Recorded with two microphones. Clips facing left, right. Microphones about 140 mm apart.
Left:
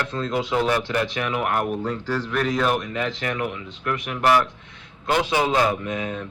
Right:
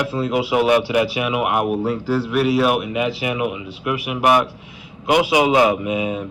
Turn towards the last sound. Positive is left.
turn(degrees=-10)  # may be behind; listen again after turning